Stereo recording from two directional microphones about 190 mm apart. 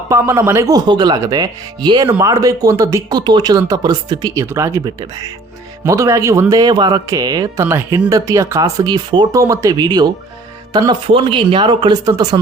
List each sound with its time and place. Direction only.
0.1 s speech: 15° right (ahead or behind)